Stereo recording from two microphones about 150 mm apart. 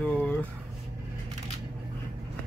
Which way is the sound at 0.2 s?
10° left (ahead or behind).